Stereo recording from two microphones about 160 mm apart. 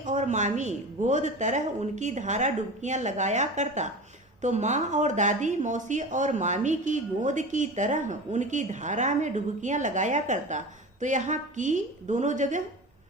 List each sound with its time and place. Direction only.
0.0 s speech: 50° right (ahead or behind)